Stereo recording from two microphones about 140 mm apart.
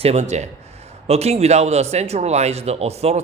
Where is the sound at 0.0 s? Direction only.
50° right (ahead or behind).